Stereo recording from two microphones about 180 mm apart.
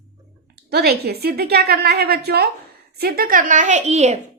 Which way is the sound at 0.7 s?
60° right (ahead or behind).